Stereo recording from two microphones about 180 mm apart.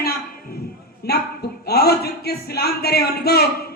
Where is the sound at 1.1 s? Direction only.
60° left (ahead or behind).